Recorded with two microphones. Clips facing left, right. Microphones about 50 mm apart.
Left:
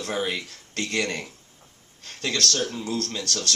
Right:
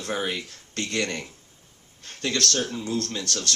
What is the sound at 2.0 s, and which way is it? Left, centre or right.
Speech, right.